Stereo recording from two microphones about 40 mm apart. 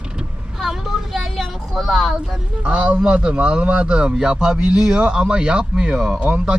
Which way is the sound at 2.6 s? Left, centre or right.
Right.